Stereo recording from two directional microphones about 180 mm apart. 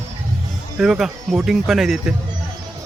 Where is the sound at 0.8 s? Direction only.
Centre (ahead or behind).